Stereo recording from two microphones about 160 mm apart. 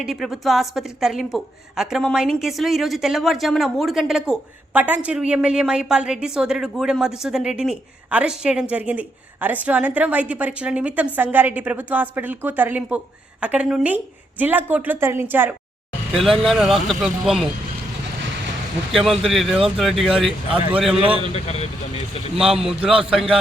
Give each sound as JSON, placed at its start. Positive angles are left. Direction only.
{"t": 0.0, "sound": "a woman's voice", "side_deg": 0}
{"t": 16.1, "sound": "a woman's voice", "side_deg": 0}
{"t": 18.9, "sound": "a woman's voice", "side_deg": 0}
{"t": 20.2, "sound": "speech", "side_deg": -30}
{"t": 20.7, "sound": "a woman's voice", "side_deg": -5}
{"t": 21.3, "sound": "speech", "side_deg": 40}
{"t": 22.4, "sound": "a woman's voice", "side_deg": -5}